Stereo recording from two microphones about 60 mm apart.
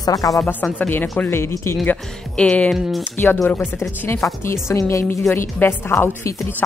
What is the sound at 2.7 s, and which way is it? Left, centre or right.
Speech, centre.